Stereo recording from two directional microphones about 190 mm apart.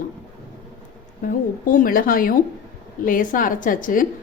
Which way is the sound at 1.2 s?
45° left (ahead or behind).